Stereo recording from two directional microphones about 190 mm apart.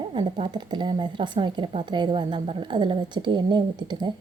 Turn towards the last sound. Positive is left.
turn(degrees=-25)  # may be behind; listen again after turning